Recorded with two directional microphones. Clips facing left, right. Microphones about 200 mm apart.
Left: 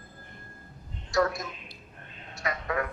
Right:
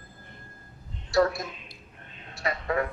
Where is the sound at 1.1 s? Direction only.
30° right (ahead or behind).